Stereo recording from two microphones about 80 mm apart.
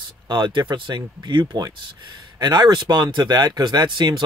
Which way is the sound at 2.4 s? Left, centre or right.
Right.